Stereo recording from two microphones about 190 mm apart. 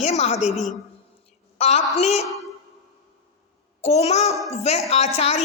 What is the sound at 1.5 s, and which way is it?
Speech, 35° left (ahead or behind).